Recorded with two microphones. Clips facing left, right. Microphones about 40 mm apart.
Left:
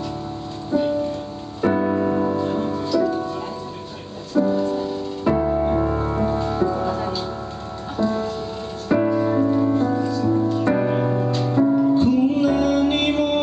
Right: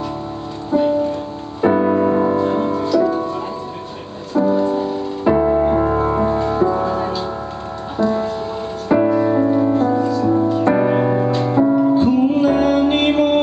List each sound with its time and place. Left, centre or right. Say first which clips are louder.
0.7 s music: right 5 dB; centre
2.8 s music: right 3 dB; centre
4.4 s music: right 4 dB; centre